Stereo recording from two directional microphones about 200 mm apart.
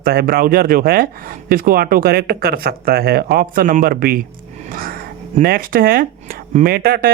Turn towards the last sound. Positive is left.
turn(degrees=-50)  # may be behind; listen again after turning